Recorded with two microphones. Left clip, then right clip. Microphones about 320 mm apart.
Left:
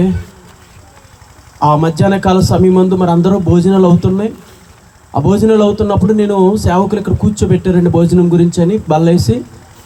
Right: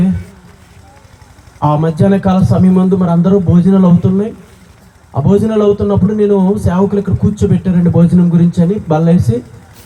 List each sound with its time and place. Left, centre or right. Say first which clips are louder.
1.5 s speech: left 3 dB; left